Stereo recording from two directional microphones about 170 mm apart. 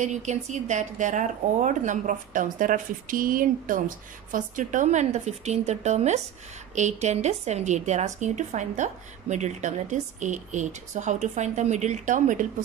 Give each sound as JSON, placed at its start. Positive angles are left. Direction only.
{"t": 0.0, "sound": "a woman's voice", "side_deg": -45}